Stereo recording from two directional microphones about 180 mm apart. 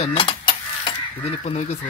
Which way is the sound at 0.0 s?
30° left (ahead or behind).